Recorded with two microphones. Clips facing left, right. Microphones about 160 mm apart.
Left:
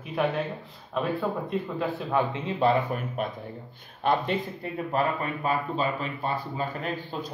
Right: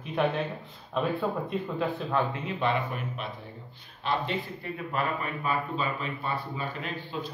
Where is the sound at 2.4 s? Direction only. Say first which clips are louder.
Left 5 dB; 40° left (ahead or behind).